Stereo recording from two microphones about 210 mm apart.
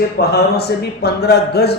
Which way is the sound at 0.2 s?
50° left (ahead or behind).